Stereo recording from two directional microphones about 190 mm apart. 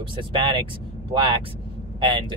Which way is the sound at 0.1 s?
25° right (ahead or behind).